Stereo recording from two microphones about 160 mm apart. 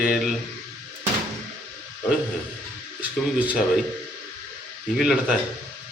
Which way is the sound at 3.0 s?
10° right (ahead or behind).